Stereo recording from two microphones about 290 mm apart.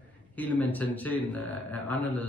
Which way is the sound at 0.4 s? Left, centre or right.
Centre.